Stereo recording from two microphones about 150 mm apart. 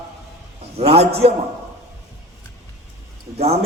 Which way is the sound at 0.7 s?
40° right (ahead or behind).